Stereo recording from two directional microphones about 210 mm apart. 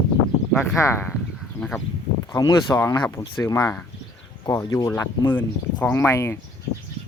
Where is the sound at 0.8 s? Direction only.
10° left (ahead or behind).